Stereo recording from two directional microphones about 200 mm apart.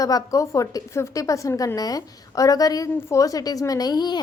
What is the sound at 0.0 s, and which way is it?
A woman's voice, 15° left (ahead or behind).